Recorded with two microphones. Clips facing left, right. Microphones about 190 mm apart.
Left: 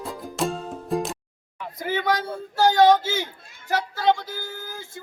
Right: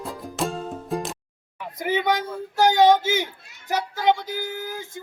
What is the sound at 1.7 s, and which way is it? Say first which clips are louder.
Speech: right 2 dB; 20° right (ahead or behind).